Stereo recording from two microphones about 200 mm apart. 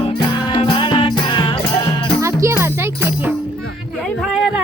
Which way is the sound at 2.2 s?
15° right (ahead or behind).